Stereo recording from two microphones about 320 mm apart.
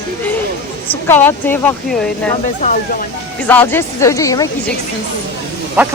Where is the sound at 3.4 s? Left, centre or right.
Centre.